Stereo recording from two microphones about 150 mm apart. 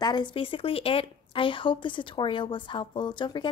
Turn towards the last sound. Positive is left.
turn(degrees=30)  # may be behind; listen again after turning